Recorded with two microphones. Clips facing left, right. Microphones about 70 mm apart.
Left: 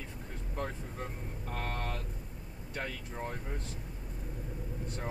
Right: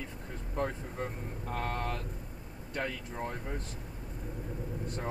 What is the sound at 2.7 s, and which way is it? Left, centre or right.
Speech, right.